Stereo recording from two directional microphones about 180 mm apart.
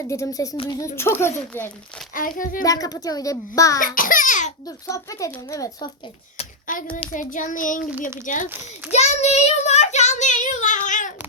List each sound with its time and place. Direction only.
0.1 s a child's voice: 20° left (ahead or behind)
2.1 s child singing: 50° left (ahead or behind)
2.6 s a child's voice: 20° left (ahead or behind)
3.8 s a sound: 50° left (ahead or behind)
4.6 s a child's voice: 20° left (ahead or behind)
6.3 s a sound: 40° left (ahead or behind)
7.1 s child singing: 45° left (ahead or behind)